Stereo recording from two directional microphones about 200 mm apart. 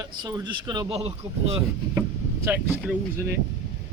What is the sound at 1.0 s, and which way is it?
Speech, 30° right (ahead or behind).